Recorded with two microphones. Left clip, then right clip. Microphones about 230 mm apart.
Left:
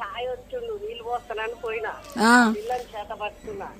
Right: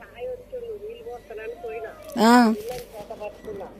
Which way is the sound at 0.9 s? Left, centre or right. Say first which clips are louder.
Left 6 dB; left.